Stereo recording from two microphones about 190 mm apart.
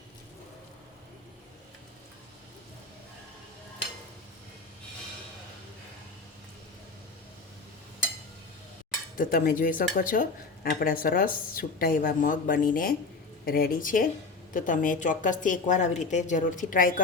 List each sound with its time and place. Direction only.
9.1 s speech: 45° left (ahead or behind)